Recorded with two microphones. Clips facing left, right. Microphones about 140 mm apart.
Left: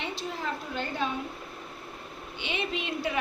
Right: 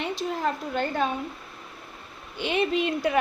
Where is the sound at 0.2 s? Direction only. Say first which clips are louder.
Right 6 dB; 50° right (ahead or behind).